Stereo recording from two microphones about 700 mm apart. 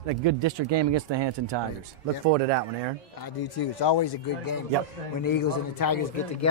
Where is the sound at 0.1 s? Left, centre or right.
Right.